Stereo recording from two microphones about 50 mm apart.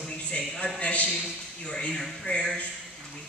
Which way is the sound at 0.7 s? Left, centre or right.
Left.